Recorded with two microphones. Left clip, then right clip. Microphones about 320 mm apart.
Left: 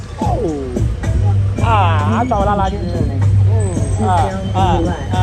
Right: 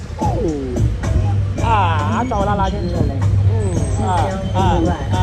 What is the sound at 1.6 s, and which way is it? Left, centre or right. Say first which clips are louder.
Music: left 1 dB; left.